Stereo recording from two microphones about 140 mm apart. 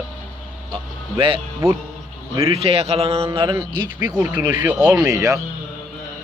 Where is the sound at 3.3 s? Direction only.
30° right (ahead or behind).